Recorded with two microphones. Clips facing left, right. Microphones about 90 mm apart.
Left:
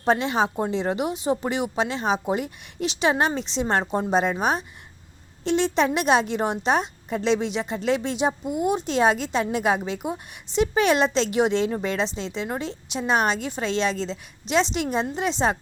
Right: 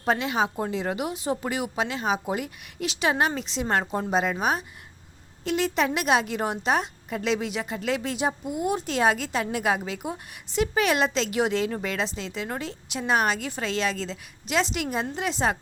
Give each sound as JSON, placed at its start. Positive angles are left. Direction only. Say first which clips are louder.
{"t": 0.0, "sound": "a woman's voice", "louder": "left 3 dB", "side_deg": 30}